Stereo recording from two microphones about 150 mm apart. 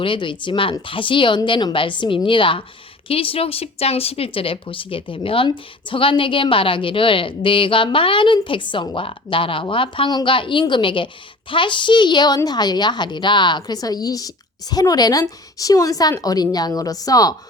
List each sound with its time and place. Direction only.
0.0 s a woman's voice: 35° left (ahead or behind)